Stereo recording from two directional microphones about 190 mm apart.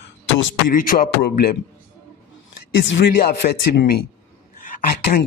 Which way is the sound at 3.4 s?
45° left (ahead or behind).